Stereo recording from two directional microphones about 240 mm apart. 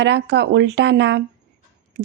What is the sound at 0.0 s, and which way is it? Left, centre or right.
A woman's voice, right.